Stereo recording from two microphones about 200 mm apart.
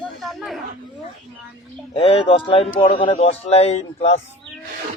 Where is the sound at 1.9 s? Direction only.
30° left (ahead or behind).